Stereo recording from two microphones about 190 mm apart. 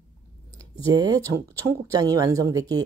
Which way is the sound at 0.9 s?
20° right (ahead or behind).